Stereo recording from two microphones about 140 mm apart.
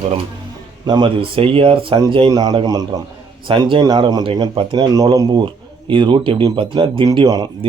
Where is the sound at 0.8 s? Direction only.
30° right (ahead or behind).